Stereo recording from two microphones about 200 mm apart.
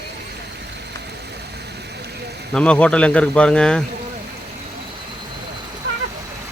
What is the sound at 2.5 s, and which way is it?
Speech, 5° left (ahead or behind).